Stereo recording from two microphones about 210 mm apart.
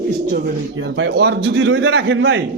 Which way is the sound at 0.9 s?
60° right (ahead or behind).